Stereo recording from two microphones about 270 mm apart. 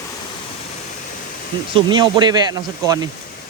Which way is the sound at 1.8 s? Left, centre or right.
Centre.